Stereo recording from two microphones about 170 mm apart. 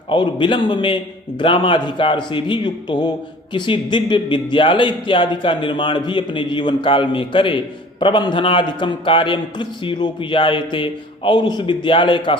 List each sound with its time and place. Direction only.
0.1 s speech: 30° left (ahead or behind)